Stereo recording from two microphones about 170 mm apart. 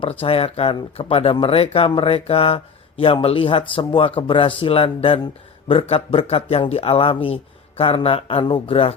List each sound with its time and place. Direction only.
0.0 s speech: 35° left (ahead or behind)